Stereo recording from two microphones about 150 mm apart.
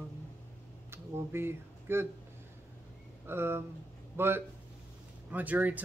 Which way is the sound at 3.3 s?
15° right (ahead or behind).